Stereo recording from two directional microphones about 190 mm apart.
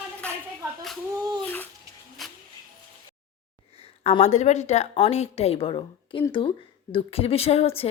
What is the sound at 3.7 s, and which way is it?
A woman's voice, 30° left (ahead or behind).